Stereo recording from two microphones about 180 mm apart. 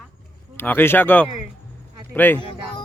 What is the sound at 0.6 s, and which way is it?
A man's voice, 10° left (ahead or behind).